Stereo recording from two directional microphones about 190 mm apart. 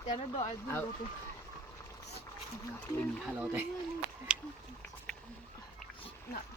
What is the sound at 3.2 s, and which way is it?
Speech, 5° right (ahead or behind).